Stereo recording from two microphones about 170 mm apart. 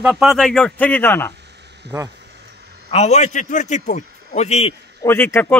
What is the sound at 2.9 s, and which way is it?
A man's voice, 40° left (ahead or behind).